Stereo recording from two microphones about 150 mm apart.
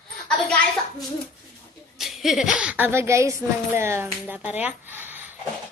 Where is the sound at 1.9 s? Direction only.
Centre (ahead or behind).